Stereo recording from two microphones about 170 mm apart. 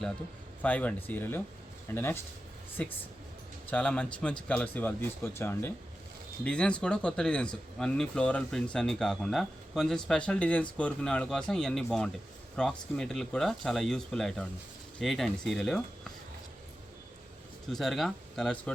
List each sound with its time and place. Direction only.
0.6 s speech: 10° left (ahead or behind)
17.7 s speech: centre (ahead or behind)